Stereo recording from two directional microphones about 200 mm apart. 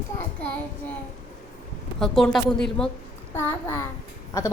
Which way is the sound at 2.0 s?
Centre (ahead or behind).